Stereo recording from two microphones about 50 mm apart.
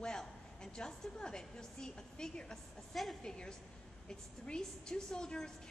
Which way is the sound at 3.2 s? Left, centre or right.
Centre.